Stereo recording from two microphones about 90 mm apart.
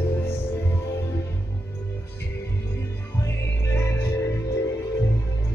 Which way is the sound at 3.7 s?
25° left (ahead or behind).